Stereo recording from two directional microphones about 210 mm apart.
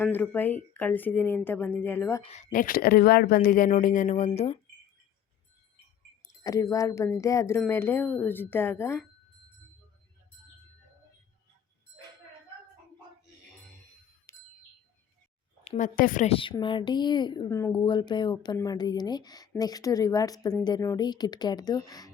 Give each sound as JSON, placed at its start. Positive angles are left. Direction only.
{"t": 0.0, "sound": "speech", "side_deg": 10}
{"t": 2.2, "sound": "a woman's voice", "side_deg": 30}
{"t": 6.4, "sound": "speech", "side_deg": 15}
{"t": 14.3, "sound": "chime", "side_deg": 15}
{"t": 15.6, "sound": "a woman's voice", "side_deg": 35}